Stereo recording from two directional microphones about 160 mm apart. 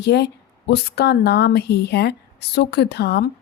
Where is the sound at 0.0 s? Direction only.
90° left.